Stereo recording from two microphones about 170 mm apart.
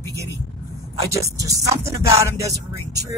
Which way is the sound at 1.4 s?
20° right (ahead or behind).